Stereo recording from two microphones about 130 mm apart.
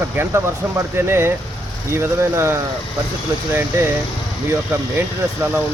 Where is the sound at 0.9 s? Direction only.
20° right (ahead or behind).